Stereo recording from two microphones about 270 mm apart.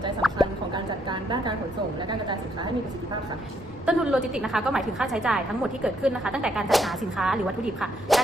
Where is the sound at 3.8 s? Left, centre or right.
Centre.